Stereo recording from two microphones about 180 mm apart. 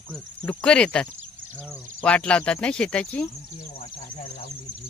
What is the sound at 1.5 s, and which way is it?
Cricket, 10° right (ahead or behind).